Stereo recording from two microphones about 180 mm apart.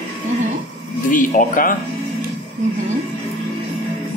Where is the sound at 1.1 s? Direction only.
50° left (ahead or behind).